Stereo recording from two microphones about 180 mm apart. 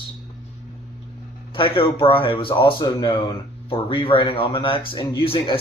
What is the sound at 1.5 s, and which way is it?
Speech, 30° left (ahead or behind).